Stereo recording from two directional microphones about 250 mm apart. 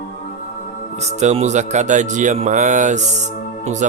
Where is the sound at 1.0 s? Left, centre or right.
Right.